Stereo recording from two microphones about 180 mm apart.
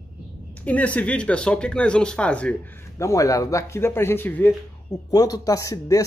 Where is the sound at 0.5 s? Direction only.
10° left (ahead or behind).